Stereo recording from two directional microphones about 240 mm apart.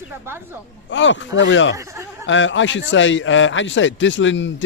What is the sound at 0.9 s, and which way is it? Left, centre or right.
Speech, left.